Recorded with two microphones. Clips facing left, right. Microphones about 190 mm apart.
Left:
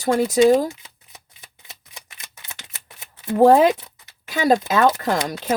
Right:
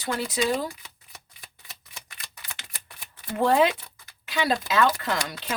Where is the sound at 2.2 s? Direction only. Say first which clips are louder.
Left 1 dB; 20° left (ahead or behind).